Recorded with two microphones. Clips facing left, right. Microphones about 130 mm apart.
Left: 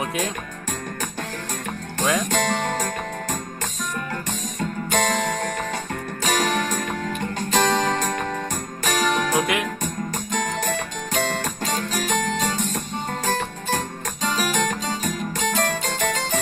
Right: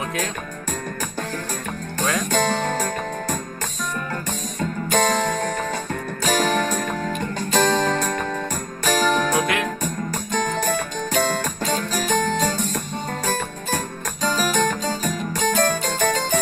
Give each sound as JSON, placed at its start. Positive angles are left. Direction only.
{"t": 2.3, "sound": "music", "side_deg": -40}
{"t": 4.9, "sound": "music", "side_deg": -35}